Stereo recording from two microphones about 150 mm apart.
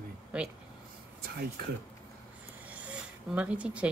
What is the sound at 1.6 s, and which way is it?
Speech, 90° right.